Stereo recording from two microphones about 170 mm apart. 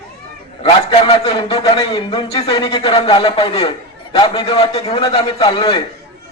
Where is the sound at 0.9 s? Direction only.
30° left (ahead or behind).